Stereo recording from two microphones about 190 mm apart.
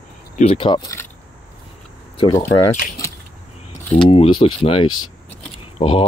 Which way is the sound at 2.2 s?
20° left (ahead or behind).